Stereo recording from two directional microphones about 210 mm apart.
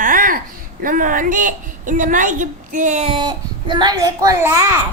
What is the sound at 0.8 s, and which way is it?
A woman's voice, 40° right (ahead or behind).